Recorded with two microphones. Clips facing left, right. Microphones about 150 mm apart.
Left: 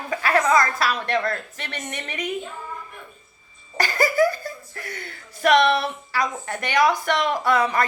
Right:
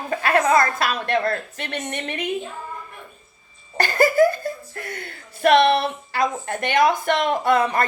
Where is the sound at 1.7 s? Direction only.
55° right (ahead or behind).